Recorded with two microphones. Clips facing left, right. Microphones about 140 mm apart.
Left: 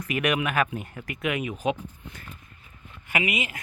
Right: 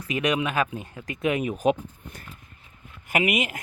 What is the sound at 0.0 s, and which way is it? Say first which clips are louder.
Speech: right 1 dB; 15° right (ahead or behind).